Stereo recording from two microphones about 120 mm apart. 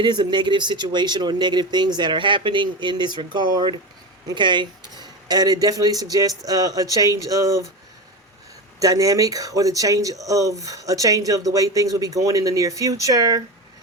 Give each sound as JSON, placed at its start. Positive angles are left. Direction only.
{"t": 0.0, "sound": "speech", "side_deg": -40}
{"t": 8.8, "sound": "speech", "side_deg": -30}